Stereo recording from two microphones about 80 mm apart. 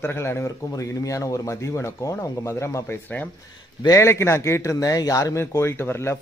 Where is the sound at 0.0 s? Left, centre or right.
Left.